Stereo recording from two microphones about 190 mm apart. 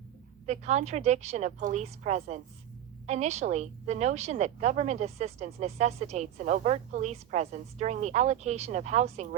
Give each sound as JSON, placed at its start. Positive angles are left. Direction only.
{"t": 0.4, "sound": "a woman's voice", "side_deg": -35}